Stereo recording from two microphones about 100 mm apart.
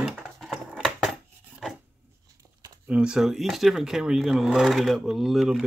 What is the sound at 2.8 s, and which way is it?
Speech, 10° right (ahead or behind).